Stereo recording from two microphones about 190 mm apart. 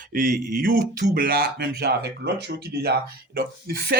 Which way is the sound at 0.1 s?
45° right (ahead or behind).